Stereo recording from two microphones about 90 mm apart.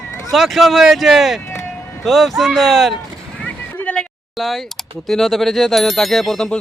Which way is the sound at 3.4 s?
15° left (ahead or behind).